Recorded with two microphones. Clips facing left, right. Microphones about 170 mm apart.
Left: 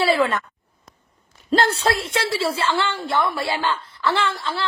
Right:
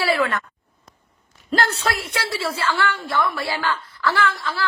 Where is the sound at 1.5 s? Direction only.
30° left (ahead or behind).